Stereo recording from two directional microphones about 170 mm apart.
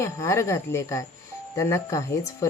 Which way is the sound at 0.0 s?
15° left (ahead or behind).